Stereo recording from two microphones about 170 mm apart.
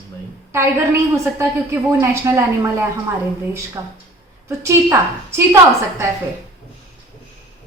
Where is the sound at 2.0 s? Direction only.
15° right (ahead or behind).